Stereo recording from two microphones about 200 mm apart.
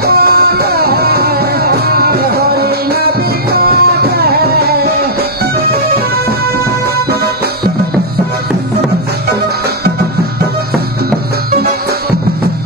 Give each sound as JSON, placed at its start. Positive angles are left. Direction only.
{"t": 0.0, "sound": "music", "side_deg": -50}